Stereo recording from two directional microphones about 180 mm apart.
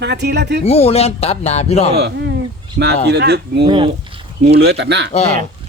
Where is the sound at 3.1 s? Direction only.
65° right (ahead or behind).